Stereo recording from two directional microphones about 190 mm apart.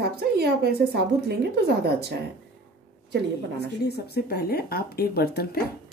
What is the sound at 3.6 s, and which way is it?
Speech, 60° left (ahead or behind).